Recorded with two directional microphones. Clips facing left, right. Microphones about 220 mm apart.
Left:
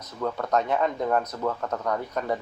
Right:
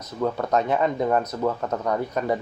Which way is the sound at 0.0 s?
15° right (ahead or behind).